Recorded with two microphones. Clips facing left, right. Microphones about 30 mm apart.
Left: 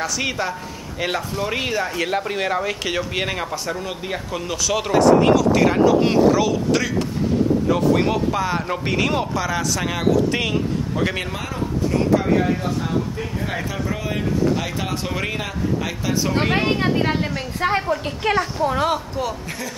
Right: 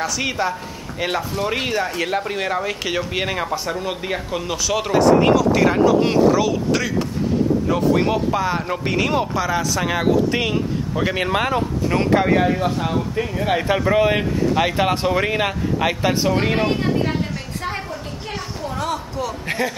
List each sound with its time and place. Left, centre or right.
0.2 s speech: centre
11.3 s speech: right
13.7 s speech: right
15.0 s speech: centre
15.3 s speech: right
16.5 s speech: centre